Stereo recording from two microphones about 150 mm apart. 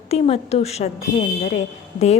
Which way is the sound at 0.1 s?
45° left (ahead or behind).